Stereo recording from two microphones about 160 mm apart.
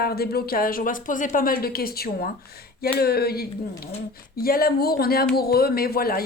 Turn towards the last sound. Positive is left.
turn(degrees=70)  # may be behind; listen again after turning